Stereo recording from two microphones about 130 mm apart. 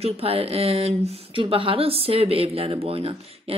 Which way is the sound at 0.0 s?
50° right (ahead or behind).